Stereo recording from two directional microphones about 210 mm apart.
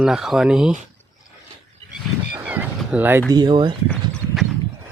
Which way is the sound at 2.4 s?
5° right (ahead or behind).